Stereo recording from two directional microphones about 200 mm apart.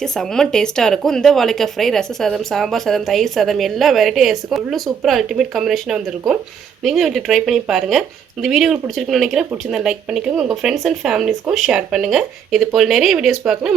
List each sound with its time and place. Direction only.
0.0 s speech: 5° left (ahead or behind)